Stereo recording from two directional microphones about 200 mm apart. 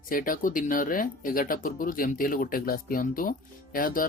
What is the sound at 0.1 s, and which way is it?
Speech, 45° left (ahead or behind).